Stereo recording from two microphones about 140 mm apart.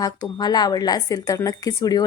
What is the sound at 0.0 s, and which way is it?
A woman's voice, 30° left (ahead or behind).